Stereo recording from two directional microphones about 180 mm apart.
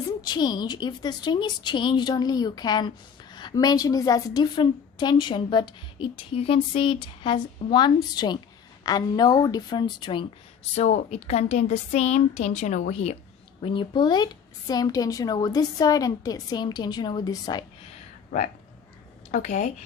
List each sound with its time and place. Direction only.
0.2 s a woman's voice: 25° left (ahead or behind)
18.3 s a woman's voice: 45° left (ahead or behind)